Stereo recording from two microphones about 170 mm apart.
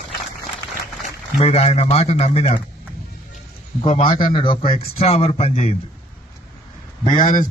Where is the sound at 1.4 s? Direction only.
35° left (ahead or behind).